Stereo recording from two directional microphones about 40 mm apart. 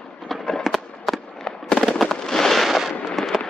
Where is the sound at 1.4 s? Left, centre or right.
Centre.